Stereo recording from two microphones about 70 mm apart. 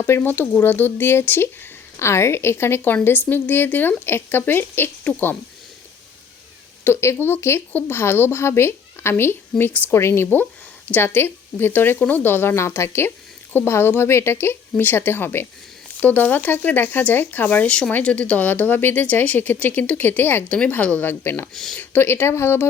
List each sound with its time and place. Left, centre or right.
0.0 s speech: left
6.8 s speech: left
21.5 s speech: centre
21.8 s speech: left